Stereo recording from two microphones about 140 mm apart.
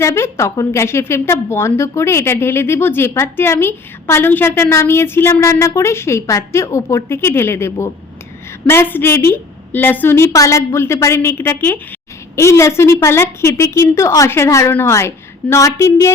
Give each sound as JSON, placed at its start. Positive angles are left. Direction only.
{"t": 0.0, "sound": "a woman's voice", "side_deg": 20}